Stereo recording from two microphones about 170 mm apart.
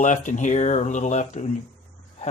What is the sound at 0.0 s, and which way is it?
Speech, 45° left (ahead or behind).